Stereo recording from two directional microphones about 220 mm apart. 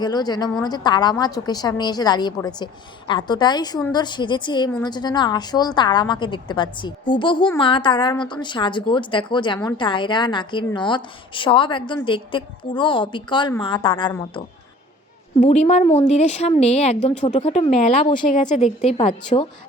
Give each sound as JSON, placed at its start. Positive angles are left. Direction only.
{"t": 0.0, "sound": "a woman's voice", "side_deg": 20}
{"t": 15.4, "sound": "speech", "side_deg": 30}
{"t": 18.3, "sound": "speech", "side_deg": 35}